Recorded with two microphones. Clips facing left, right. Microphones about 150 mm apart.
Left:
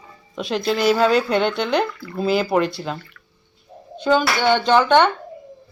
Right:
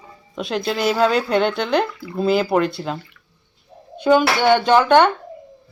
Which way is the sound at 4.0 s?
10° right (ahead or behind).